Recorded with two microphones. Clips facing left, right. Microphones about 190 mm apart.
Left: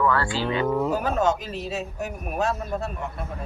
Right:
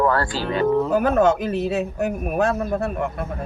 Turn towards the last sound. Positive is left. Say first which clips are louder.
# right 7 dB
turn(degrees=-55)  # may be behind; listen again after turning